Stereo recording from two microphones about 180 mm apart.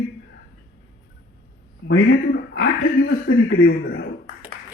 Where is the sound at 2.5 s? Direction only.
90° left.